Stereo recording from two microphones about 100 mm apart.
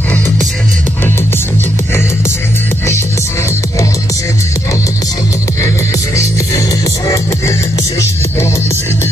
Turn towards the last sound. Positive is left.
turn(degrees=30)  # may be behind; listen again after turning